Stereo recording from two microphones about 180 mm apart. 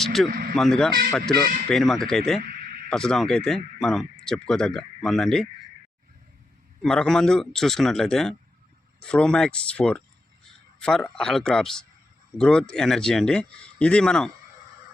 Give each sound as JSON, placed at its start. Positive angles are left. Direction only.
{"t": 0.0, "sound": "speech", "side_deg": 0}
{"t": 0.3, "sound": "speech", "side_deg": -55}
{"t": 0.5, "sound": "speech", "side_deg": 5}
{"t": 6.8, "sound": "speech", "side_deg": 5}